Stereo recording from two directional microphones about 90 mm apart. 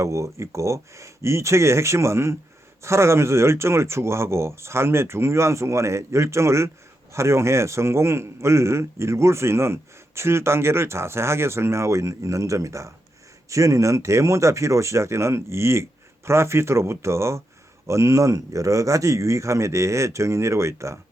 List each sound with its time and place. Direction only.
0.0 s a man's voice: 35° right (ahead or behind)